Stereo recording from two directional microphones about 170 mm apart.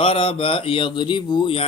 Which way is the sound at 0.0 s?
35° left (ahead or behind).